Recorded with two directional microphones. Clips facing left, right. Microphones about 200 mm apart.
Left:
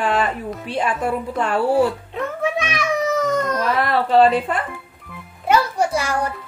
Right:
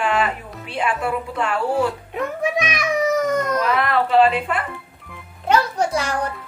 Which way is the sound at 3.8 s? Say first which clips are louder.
Left 2 dB; 35° left (ahead or behind).